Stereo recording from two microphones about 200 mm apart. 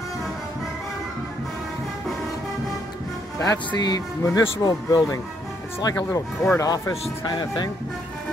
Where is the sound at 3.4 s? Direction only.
20° left (ahead or behind).